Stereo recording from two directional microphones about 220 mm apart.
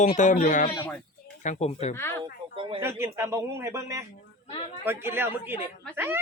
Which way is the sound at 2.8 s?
10° right (ahead or behind).